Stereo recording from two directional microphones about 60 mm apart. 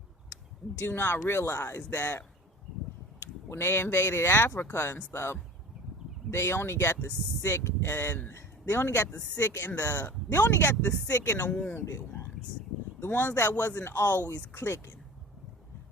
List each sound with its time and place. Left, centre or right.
0.9 s speech: left
1.9 s speech: left
3.5 s speech: left
8.3 s a sound: left
9.4 s speech: left
9.6 s speech: left
13.5 s speech: left